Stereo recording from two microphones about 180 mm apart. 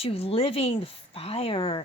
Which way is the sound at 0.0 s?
35° left (ahead or behind).